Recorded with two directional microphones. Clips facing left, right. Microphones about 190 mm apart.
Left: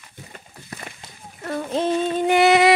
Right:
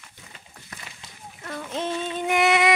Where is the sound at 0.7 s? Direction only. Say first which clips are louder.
Left 7 dB; 30° left (ahead or behind).